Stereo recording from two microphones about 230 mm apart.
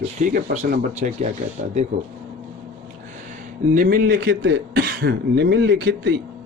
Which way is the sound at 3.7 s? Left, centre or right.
Right.